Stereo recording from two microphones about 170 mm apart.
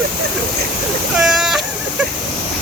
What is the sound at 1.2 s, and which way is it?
Speech, 5° right (ahead or behind).